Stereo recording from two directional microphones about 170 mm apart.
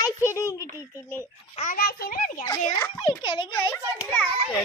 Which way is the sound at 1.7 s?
65° left (ahead or behind).